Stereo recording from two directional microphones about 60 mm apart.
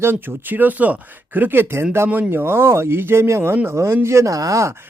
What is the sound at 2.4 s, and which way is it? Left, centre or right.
Speech, right.